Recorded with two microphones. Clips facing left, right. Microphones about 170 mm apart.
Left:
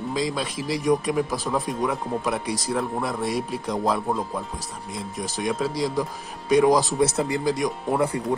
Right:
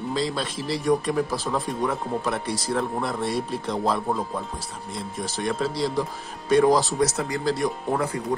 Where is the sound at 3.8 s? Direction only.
Centre (ahead or behind).